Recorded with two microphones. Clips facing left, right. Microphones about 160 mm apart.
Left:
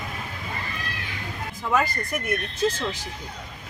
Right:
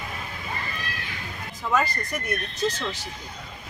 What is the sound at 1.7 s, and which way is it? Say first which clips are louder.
Speech: left 1 dB; 10° left (ahead or behind).